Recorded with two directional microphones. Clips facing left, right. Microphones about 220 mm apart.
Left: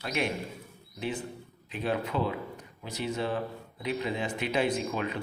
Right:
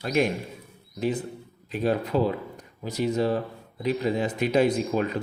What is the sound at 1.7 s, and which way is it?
Speech, 40° right (ahead or behind).